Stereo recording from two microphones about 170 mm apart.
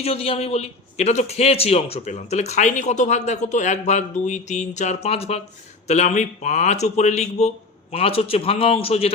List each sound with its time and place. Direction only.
0.0 s a man's voice: 35° left (ahead or behind)